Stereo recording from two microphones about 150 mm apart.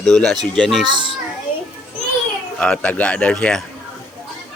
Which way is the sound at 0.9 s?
30° right (ahead or behind).